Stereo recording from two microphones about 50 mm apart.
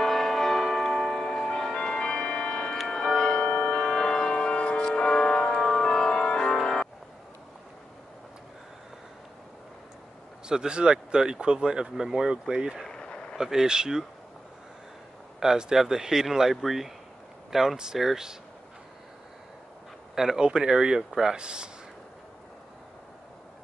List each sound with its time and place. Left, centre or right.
0.0 s music: centre
3.1 s tick-tock: centre
3.3 s music: left
3.7 s music: centre
10.5 s speech: centre
12.8 s a sound: centre
13.4 s speech: centre
15.4 s speech: centre
20.2 s speech: centre